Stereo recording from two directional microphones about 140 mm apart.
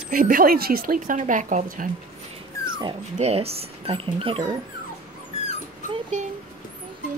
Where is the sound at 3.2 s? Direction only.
45° right (ahead or behind).